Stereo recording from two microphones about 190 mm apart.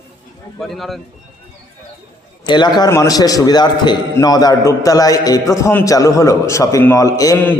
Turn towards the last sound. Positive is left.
turn(degrees=15)  # may be behind; listen again after turning